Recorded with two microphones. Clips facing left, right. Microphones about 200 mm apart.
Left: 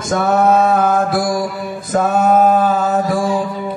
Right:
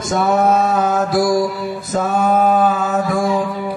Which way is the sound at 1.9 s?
50° left (ahead or behind).